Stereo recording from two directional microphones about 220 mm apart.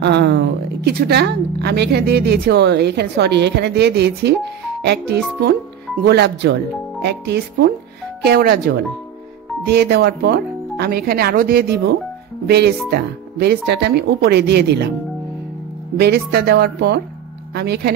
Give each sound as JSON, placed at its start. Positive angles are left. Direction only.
{"t": 0.0, "sound": "a woman's voice", "side_deg": -50}
{"t": 16.0, "sound": "a woman's voice", "side_deg": -45}